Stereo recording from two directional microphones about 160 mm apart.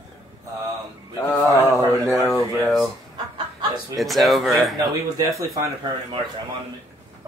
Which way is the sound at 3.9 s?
Centre (ahead or behind).